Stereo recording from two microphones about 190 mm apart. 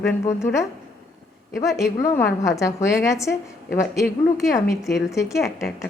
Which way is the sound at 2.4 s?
15° left (ahead or behind).